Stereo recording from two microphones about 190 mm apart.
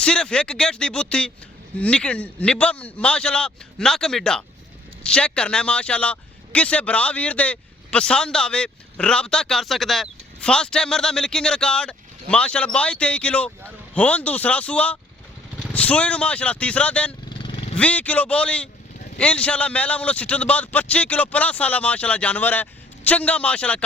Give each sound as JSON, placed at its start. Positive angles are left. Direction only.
{"t": 0.0, "sound": "a man's voice", "side_deg": 5}
{"t": 17.2, "sound": "vehicle", "side_deg": 25}
{"t": 17.7, "sound": "a man's voice", "side_deg": 5}